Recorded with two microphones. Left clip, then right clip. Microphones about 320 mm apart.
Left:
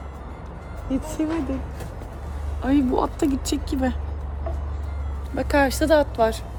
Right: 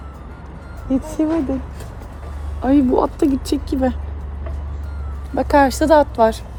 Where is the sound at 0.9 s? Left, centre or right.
Centre.